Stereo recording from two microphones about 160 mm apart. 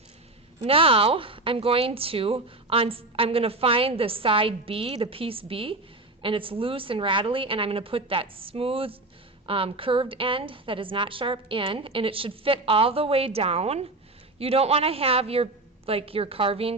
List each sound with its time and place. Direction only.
0.6 s speech: 35° right (ahead or behind)